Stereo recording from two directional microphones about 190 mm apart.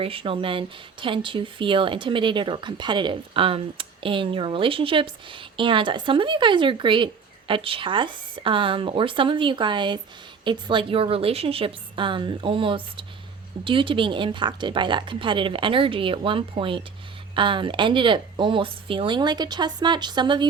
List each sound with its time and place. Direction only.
0.0 s speech: 30° right (ahead or behind)